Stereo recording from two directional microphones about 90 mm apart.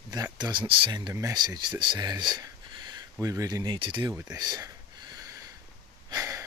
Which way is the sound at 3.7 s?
65° right (ahead or behind).